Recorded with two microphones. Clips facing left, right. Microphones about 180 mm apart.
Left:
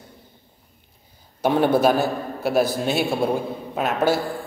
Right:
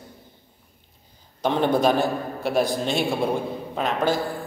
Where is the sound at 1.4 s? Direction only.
10° left (ahead or behind).